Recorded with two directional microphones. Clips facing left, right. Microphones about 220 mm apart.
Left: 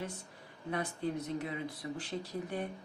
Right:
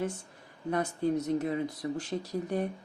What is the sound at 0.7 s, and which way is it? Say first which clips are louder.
Speech: right 7 dB; 45° right (ahead or behind).